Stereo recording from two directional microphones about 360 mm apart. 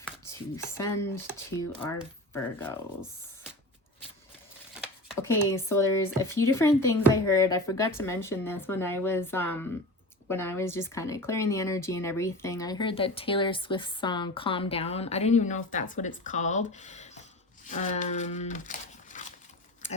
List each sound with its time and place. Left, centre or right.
0.5 s speech: centre
4.8 s speech: centre; by 19.3 s left